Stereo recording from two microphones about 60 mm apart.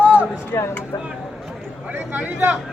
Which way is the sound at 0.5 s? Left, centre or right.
Left.